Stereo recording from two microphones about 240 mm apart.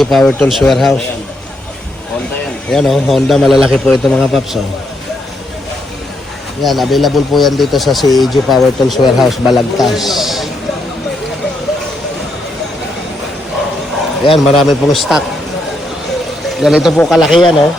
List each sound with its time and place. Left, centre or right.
0.0 s speech: centre
2.6 s speech: centre
6.6 s speech: centre
14.3 s speech: centre
16.6 s speech: centre